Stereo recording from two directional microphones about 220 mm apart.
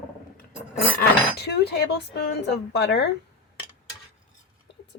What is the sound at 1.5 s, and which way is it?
A woman's voice, 50° left (ahead or behind).